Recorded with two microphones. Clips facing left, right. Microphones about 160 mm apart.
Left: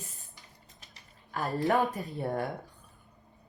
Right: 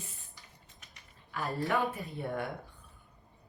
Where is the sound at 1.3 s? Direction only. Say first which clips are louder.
Left 4 dB; 40° left (ahead or behind).